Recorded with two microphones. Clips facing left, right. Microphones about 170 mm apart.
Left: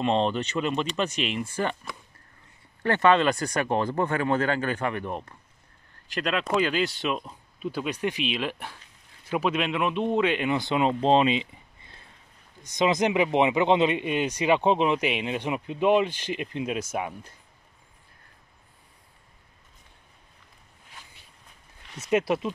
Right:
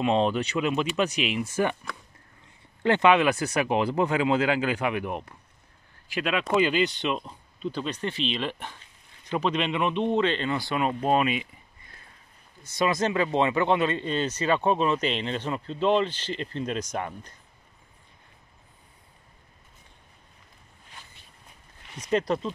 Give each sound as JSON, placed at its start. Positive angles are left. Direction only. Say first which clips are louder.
{"t": 0.0, "sound": "speech", "louder": "right 1 dB", "side_deg": -5}
{"t": 2.8, "sound": "speech", "louder": "right 1 dB", "side_deg": -15}
{"t": 12.6, "sound": "speech", "louder": "left 2 dB", "side_deg": 20}
{"t": 21.9, "sound": "speech", "louder": "left 1 dB", "side_deg": 5}